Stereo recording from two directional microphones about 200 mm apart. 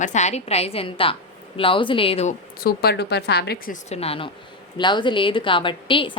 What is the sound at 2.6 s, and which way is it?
A woman's voice, 55° left (ahead or behind).